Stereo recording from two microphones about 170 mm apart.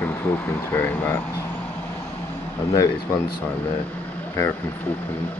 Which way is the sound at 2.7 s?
20° left (ahead or behind).